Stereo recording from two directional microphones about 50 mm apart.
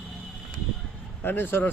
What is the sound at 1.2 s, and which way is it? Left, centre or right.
Speech, left.